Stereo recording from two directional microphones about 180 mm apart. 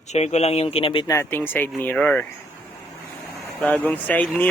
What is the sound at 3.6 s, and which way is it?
Speech, 10° left (ahead or behind).